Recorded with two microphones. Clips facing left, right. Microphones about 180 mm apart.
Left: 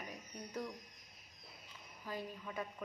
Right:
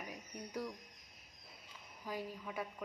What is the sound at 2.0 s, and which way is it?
Speech, 10° right (ahead or behind).